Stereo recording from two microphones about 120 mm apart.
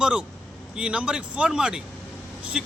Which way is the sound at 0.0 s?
5° right (ahead or behind).